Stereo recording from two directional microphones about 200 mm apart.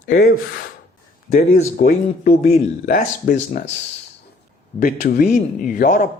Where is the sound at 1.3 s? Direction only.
45° left (ahead or behind).